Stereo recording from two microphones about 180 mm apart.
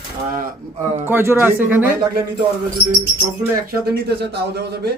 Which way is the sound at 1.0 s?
15° right (ahead or behind).